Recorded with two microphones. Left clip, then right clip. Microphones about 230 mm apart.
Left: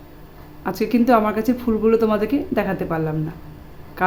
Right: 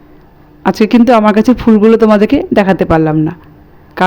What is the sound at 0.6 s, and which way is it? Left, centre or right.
A woman's voice, right.